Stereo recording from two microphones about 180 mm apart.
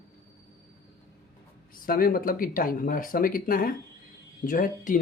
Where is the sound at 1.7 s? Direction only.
55° left (ahead or behind).